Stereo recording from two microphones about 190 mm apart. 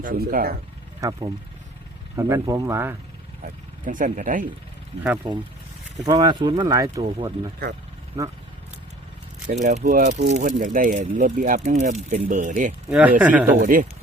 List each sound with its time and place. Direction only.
0.0 s speech: 50° right (ahead or behind)
1.0 s speech: 15° right (ahead or behind)
3.8 s speech: 45° right (ahead or behind)
6.1 s speech: 20° right (ahead or behind)
9.5 s speech: 40° right (ahead or behind)
12.9 s speech: 5° right (ahead or behind)
13.6 s speech: 45° right (ahead or behind)